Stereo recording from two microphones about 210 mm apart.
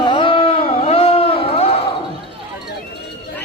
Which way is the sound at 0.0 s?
25° left (ahead or behind).